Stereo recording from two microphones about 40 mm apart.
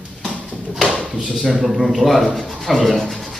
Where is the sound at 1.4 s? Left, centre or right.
Centre.